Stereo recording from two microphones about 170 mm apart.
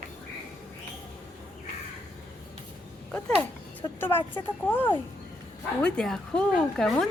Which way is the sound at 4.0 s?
15° left (ahead or behind).